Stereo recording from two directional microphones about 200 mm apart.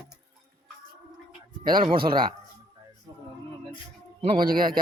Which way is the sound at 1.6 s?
45° right (ahead or behind).